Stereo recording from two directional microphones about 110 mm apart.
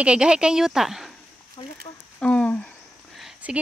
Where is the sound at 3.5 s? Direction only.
10° right (ahead or behind).